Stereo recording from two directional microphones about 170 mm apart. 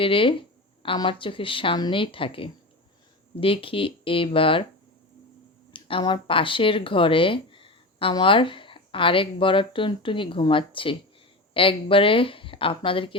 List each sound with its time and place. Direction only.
0.0 s speech: 30° left (ahead or behind)
5.7 s speech: 30° left (ahead or behind)